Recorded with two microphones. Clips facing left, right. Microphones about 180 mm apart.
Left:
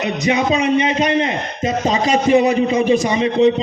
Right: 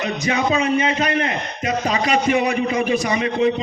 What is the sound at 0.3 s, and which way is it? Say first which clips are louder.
A man's voice: left 3 dB; 20° left (ahead or behind).